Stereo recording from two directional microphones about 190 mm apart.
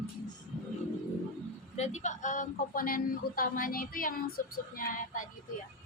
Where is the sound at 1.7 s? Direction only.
35° left (ahead or behind).